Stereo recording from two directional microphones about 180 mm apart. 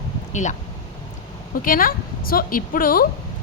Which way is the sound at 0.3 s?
40° left (ahead or behind).